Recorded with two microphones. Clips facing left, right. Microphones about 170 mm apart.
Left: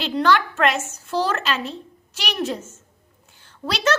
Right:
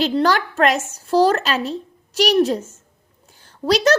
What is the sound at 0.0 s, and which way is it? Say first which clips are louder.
A woman's voice: right 2 dB; 40° right (ahead or behind).